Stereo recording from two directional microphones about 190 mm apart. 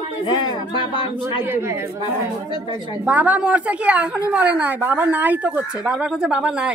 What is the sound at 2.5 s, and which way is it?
Speech, 25° left (ahead or behind).